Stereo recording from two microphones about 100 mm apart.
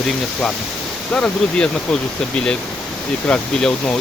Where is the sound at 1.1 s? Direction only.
10° left (ahead or behind).